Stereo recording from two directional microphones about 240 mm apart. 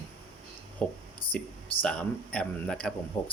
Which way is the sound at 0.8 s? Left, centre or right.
Centre.